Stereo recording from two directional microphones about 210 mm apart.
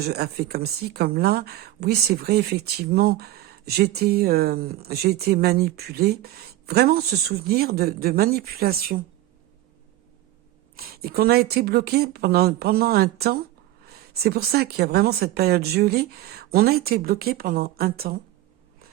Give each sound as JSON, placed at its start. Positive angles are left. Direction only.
{"t": 0.0, "sound": "a woman's voice", "side_deg": -50}
{"t": 10.8, "sound": "a woman's voice", "side_deg": -45}